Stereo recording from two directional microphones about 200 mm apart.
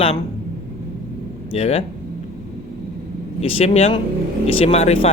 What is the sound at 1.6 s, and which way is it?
Speech, 30° left (ahead or behind).